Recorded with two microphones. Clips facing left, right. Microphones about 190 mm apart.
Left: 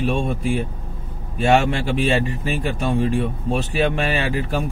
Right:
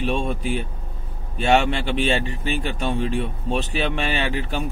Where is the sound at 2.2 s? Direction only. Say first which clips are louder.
Left 2 dB; 40° left (ahead or behind).